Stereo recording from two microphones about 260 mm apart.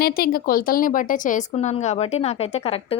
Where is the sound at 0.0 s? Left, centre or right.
Left.